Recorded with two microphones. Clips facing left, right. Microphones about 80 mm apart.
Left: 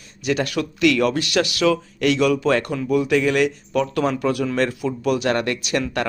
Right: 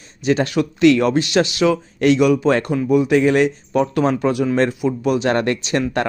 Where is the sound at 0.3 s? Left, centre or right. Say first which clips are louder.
Right 4 dB; right.